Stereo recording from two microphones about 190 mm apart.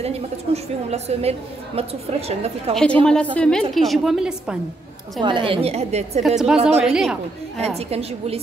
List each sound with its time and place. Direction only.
0.0 s a woman's voice: 35° right (ahead or behind)
2.7 s a woman's voice: 5° left (ahead or behind)
5.2 s a woman's voice: 25° right (ahead or behind)
6.2 s a woman's voice: 5° right (ahead or behind)
7.6 s a woman's voice: 30° right (ahead or behind)